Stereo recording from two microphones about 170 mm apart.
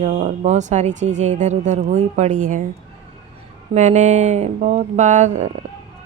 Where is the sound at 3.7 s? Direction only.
45° right (ahead or behind).